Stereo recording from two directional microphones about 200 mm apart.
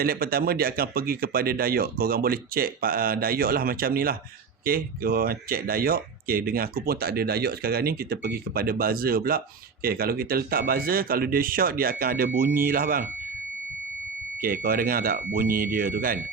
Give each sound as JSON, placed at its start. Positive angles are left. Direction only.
{"t": 0.0, "sound": "speech", "side_deg": -50}
{"t": 14.4, "sound": "speech", "side_deg": -45}